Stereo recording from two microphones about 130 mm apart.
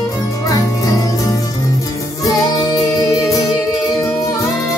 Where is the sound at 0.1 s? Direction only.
25° left (ahead or behind).